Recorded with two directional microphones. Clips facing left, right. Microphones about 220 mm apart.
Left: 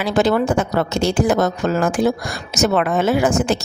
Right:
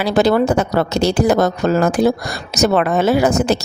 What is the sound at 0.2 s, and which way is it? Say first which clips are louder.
Speech: right 2 dB; 35° right (ahead or behind).